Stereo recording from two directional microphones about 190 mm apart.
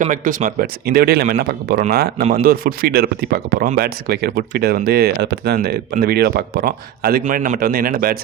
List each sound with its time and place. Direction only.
0.0 s speech: 45° right (ahead or behind)